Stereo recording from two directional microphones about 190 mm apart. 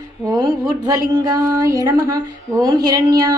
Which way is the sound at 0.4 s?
20° right (ahead or behind).